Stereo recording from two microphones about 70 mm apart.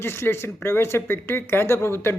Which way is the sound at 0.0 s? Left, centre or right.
Left.